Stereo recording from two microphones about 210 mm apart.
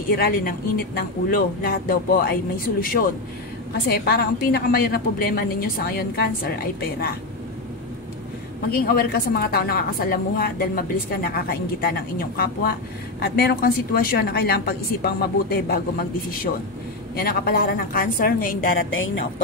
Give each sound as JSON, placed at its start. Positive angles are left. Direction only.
{"t": 0.1, "sound": "a woman's voice", "side_deg": 45}
{"t": 8.6, "sound": "a woman's voice", "side_deg": 45}
{"t": 17.1, "sound": "a woman's voice", "side_deg": 45}
{"t": 18.9, "sound": "a woman's voice", "side_deg": 70}